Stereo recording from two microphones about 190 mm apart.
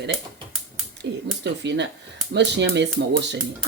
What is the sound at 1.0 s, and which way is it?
Speech, 65° right (ahead or behind).